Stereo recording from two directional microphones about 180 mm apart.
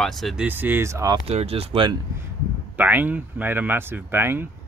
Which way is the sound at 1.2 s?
35° right (ahead or behind).